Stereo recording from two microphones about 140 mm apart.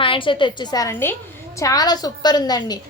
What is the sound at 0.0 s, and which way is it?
A woman's voice, 35° left (ahead or behind).